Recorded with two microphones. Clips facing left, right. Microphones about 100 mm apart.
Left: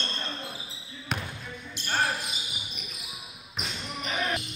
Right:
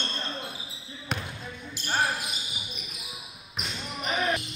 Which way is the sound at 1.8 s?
Centre (ahead or behind).